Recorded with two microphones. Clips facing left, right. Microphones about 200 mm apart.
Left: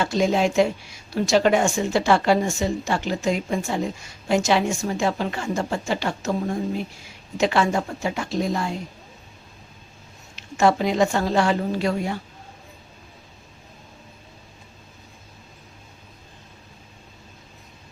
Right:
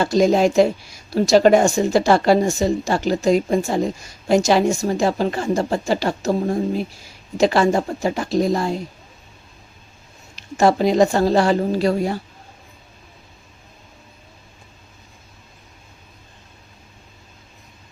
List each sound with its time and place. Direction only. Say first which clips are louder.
0.0 s a woman's voice: right 5 dB; 40° right (ahead or behind)
10.3 s a woman's voice: right 3 dB; 40° right (ahead or behind)